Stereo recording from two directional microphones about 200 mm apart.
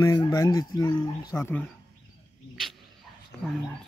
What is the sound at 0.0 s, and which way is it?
Speech, 15° left (ahead or behind).